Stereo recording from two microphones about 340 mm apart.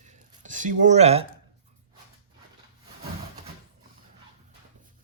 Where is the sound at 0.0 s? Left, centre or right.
Right.